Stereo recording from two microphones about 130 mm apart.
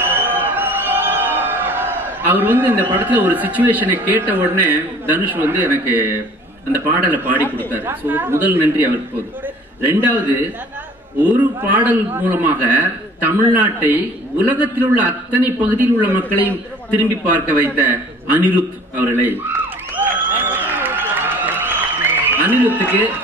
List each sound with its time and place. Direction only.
0.1 s music: 15° right (ahead or behind)
3.1 s a man's voice: 15° right (ahead or behind)
20.0 s applause: 15° right (ahead or behind)